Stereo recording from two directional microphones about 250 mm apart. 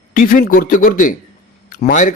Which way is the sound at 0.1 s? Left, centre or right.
Left.